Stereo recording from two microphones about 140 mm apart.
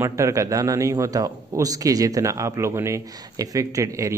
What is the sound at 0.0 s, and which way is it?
A man's voice, 20° right (ahead or behind).